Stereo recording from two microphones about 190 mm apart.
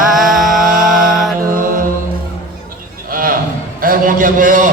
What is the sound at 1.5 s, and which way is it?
Mantra, 45° right (ahead or behind).